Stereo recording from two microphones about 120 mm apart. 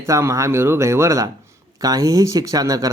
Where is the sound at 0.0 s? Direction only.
25° right (ahead or behind).